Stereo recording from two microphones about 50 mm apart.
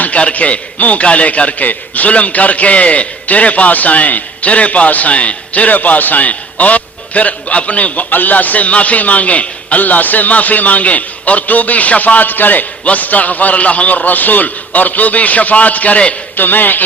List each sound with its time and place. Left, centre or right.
0.0 s a man's voice: left
16.4 s a man's voice: left